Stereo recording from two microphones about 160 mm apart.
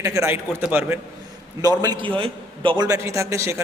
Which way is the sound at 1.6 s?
25° right (ahead or behind).